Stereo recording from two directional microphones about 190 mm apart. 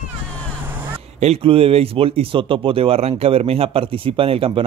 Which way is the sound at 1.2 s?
30° right (ahead or behind).